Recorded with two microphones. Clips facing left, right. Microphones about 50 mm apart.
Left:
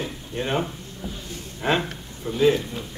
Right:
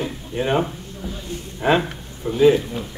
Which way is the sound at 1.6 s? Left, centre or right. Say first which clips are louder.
Right 5 dB; centre.